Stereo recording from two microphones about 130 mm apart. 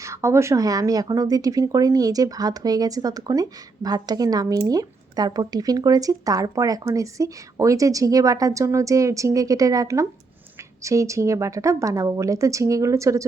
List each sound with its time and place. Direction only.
0.0 s speech: 20° right (ahead or behind)